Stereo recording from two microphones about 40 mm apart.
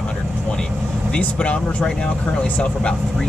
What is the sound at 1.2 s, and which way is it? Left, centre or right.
Speech, left.